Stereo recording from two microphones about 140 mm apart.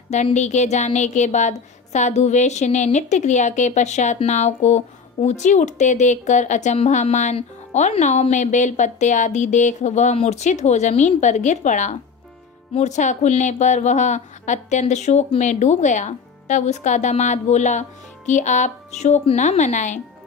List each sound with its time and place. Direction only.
0.3 s a woman's voice: 55° left (ahead or behind)